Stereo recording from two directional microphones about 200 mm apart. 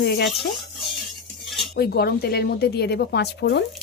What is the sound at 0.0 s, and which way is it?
Speech, 55° left (ahead or behind).